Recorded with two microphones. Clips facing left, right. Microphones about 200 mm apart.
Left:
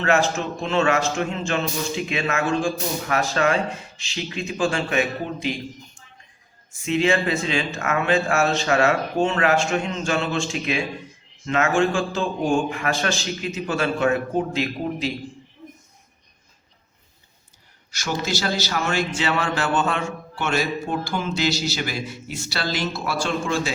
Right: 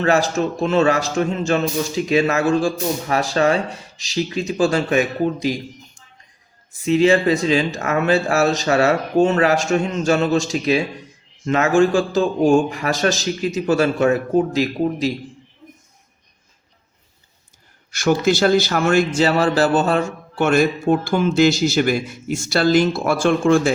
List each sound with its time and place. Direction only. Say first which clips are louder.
0.0 s a man's voice: right 4 dB; 35° right (ahead or behind)
6.8 s a man's voice: right 6 dB; 35° right (ahead or behind)
17.9 s a man's voice: right 9 dB; 55° right (ahead or behind)